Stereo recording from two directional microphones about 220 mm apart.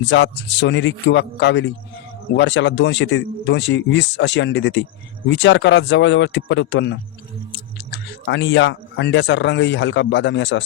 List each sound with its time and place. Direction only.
0.0 s a man's voice: 55° left (ahead or behind)
7.9 s a sound: 50° left (ahead or behind)
8.2 s a man's voice: 55° left (ahead or behind)